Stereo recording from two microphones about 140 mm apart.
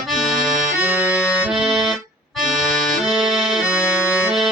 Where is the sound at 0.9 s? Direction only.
20° left (ahead or behind).